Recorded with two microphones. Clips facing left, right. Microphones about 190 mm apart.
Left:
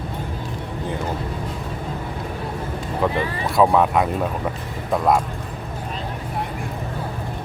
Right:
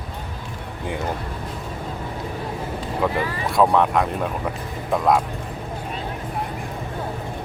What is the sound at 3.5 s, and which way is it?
Speech, 5° left (ahead or behind).